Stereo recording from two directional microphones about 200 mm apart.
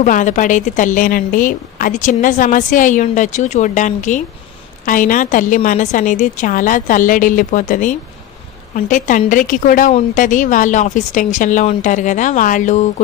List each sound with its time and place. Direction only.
0.0 s a woman's voice: 40° left (ahead or behind)